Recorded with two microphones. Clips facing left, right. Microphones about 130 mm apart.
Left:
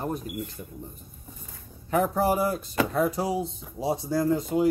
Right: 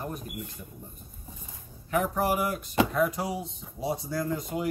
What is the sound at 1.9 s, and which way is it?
Speech, 35° left (ahead or behind).